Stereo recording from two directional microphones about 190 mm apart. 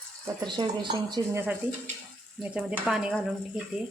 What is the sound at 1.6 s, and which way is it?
Speech, 10° right (ahead or behind).